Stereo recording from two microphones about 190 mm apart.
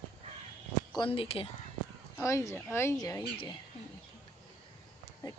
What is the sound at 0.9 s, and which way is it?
Speech, 25° left (ahead or behind).